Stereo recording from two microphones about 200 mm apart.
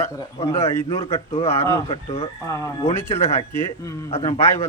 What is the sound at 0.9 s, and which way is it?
Speech, 30° left (ahead or behind).